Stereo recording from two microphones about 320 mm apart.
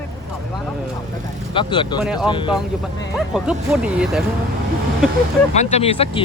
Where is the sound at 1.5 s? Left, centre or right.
Centre.